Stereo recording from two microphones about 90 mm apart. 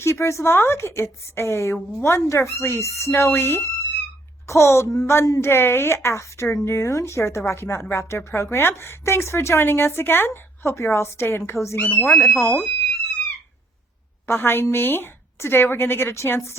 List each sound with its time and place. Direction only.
0.0 s speech: 30° left (ahead or behind)
14.3 s speech: 25° left (ahead or behind)